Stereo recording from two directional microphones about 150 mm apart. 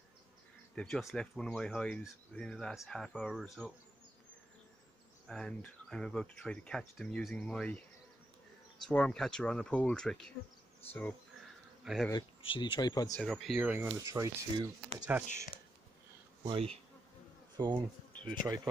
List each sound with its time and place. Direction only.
0.7 s speech: 5° left (ahead or behind)
5.3 s speech: 5° left (ahead or behind)
8.8 s speech: 5° left (ahead or behind)
10.9 s bee: 10° left (ahead or behind)
11.8 s speech: centre (ahead or behind)
12.4 s speech: 35° left (ahead or behind)
13.2 s speech: centre (ahead or behind); by 14.7 s 20° right (ahead or behind)
15.1 s speech: 10° right (ahead or behind)
16.4 s bee: 40° right (ahead or behind)
17.6 s speech: 30° right (ahead or behind)
18.4 s speech: 15° right (ahead or behind)